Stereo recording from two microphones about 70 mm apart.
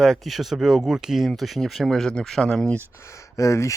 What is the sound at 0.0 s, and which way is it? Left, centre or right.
Speech, centre.